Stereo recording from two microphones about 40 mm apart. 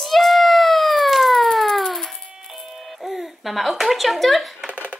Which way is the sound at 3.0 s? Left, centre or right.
Centre.